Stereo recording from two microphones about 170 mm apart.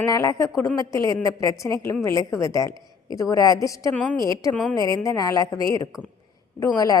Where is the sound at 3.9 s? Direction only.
10° left (ahead or behind).